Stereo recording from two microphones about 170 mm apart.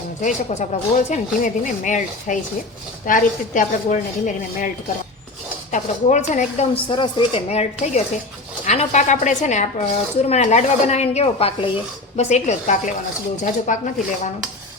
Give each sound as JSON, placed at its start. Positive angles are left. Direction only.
{"t": 0.2, "sound": "a woman's voice", "side_deg": 45}
{"t": 5.7, "sound": "a woman's voice", "side_deg": 45}
{"t": 6.8, "sound": "a woman's voice", "side_deg": 25}